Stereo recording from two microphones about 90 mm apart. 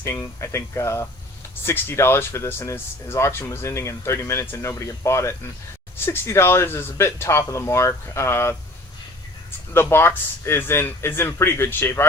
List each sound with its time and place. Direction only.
0.0 s speech: 30° left (ahead or behind)
9.7 s speech: 25° left (ahead or behind)